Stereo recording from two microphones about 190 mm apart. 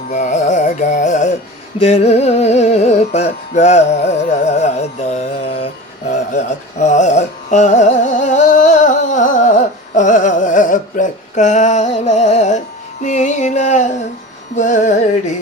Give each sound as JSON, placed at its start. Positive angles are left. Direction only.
{"t": 0.1, "sound": "music", "side_deg": 40}
{"t": 6.1, "sound": "carnatic music", "side_deg": 40}
{"t": 14.5, "sound": "music", "side_deg": 40}